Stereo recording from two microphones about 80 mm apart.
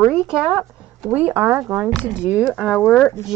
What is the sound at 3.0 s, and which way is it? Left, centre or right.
Speech, left.